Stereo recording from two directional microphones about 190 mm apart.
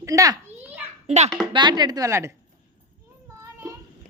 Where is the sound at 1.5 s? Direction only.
25° right (ahead or behind).